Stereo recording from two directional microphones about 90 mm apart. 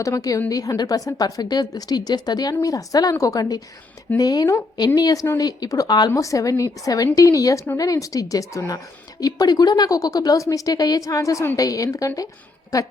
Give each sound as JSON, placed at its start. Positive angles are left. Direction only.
{"t": 0.0, "sound": "a woman's voice", "side_deg": 40}